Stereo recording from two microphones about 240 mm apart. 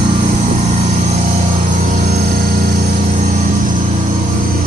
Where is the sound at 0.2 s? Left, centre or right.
Right.